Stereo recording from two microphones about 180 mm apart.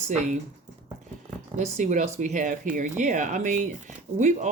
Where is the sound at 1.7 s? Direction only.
40° right (ahead or behind).